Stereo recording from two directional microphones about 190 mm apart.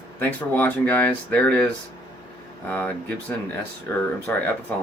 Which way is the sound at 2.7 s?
10° left (ahead or behind).